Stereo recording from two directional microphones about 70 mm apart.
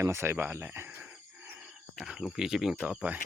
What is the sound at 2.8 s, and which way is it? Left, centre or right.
Speech, centre.